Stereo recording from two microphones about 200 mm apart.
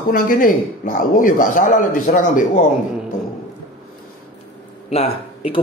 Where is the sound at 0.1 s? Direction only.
45° left (ahead or behind).